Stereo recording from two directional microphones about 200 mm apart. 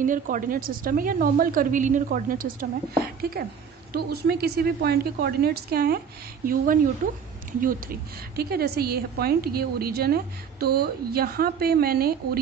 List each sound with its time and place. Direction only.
0.0 s a woman's voice: 40° right (ahead or behind)
8.4 s a woman's voice: 50° right (ahead or behind)